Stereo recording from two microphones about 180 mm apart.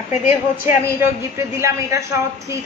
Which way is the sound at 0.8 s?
15° right (ahead or behind).